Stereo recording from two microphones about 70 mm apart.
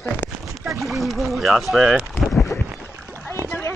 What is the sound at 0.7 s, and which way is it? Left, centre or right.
Speech, centre.